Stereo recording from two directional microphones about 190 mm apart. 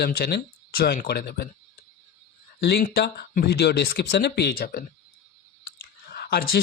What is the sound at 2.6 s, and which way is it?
Speech, 55° left (ahead or behind).